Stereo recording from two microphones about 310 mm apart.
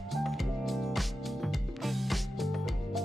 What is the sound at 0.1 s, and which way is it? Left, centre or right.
Music, centre.